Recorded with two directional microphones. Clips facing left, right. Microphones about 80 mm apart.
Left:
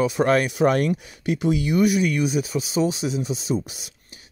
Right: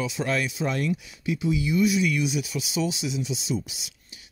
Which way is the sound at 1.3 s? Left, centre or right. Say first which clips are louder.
Left 4 dB; left.